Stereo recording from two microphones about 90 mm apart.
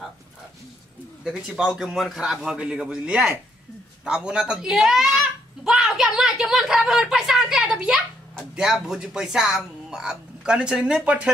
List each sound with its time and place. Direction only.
1.2 s speech: 5° right (ahead or behind)